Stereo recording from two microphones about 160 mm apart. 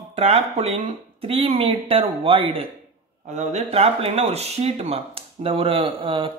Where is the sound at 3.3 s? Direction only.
45° right (ahead or behind).